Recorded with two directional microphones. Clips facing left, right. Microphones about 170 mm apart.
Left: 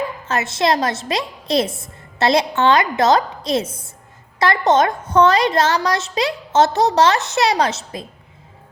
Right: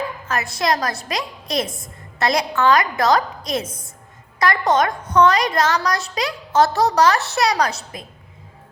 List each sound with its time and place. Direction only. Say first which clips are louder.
0.3 s a woman's voice: left 3 dB; 25° left (ahead or behind)